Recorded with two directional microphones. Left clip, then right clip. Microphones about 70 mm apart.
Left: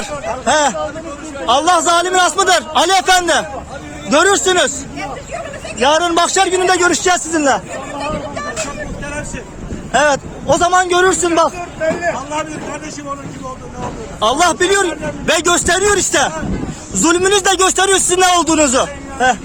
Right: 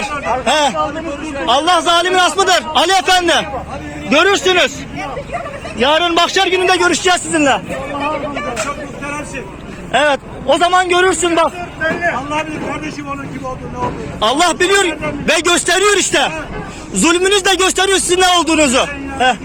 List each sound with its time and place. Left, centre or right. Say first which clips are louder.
0.4 s a man's voice: left 1 dB; left
2.3 s a man's voice: even; left
2.7 s a man's voice: even; left
5.8 s a man's voice: even; centre
6.1 s a man's voice: right 1 dB; left
7.9 s vehicle: right 3 dB; centre
9.9 s a man's voice: even; centre
10.4 s a man's voice: right 1 dB; left
14.2 s a man's voice: even; centre
14.8 s a man's voice: right 1 dB; left
15.4 s a man's voice: right 1 dB; left
17.7 s a man's voice: even; left